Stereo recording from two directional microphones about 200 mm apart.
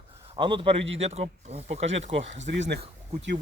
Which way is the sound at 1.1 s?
30° right (ahead or behind).